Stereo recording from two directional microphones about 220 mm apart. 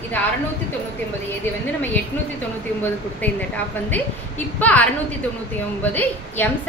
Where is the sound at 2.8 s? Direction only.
5° left (ahead or behind).